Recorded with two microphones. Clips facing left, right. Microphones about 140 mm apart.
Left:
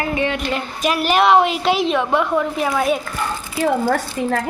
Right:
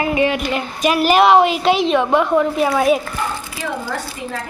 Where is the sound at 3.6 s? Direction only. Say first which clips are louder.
Left 9 dB; 55° left (ahead or behind).